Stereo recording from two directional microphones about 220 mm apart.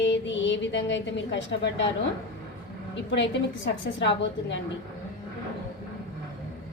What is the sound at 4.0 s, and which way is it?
Speech, 55° left (ahead or behind).